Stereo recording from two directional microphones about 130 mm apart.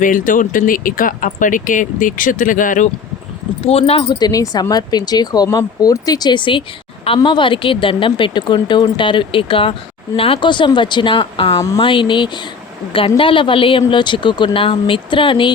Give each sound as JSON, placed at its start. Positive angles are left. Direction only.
{"t": 0.0, "sound": "speech", "side_deg": 90}
{"t": 3.6, "sound": "speech", "side_deg": 50}
{"t": 4.2, "sound": "speech", "side_deg": 30}